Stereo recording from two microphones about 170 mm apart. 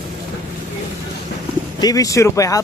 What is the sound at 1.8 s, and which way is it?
Speech, 20° left (ahead or behind).